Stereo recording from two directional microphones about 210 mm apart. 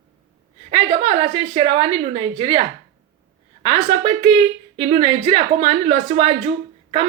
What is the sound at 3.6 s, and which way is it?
A woman's voice, 25° right (ahead or behind).